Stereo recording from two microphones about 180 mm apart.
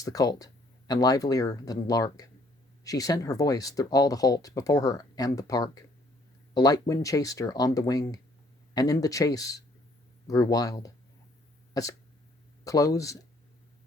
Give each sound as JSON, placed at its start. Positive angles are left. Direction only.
{"t": 0.0, "sound": "speech", "side_deg": 20}